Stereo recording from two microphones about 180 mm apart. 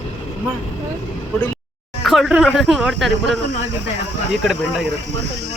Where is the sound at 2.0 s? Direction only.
Centre (ahead or behind).